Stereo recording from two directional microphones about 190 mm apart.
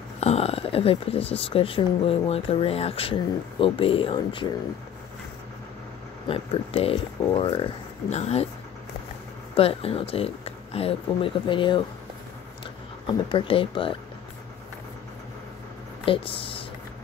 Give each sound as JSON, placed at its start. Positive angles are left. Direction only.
{"t": 0.2, "sound": "speech", "side_deg": 35}
{"t": 6.2, "sound": "speech", "side_deg": 30}
{"t": 9.6, "sound": "speech", "side_deg": 30}
{"t": 13.0, "sound": "speech", "side_deg": 25}
{"t": 16.1, "sound": "speech", "side_deg": 30}